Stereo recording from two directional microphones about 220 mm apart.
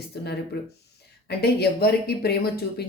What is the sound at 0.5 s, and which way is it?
Speech, 45° left (ahead or behind).